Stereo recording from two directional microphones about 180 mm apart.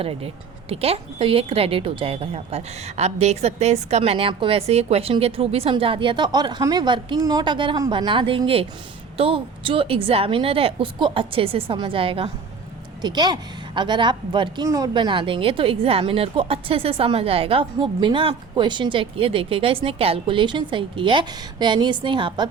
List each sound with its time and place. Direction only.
0.0 s a woman's voice: 30° right (ahead or behind)